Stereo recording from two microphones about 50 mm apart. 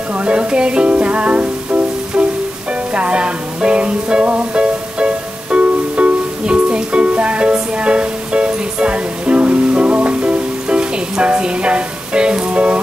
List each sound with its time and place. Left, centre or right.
0.2 s music: right